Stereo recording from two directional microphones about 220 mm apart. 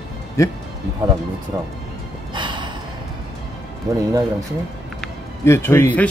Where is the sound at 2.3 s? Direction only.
20° right (ahead or behind).